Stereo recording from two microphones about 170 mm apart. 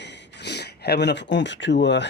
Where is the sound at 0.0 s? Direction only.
90° left.